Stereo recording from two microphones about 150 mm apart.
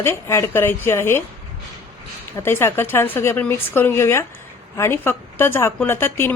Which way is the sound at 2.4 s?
15° left (ahead or behind).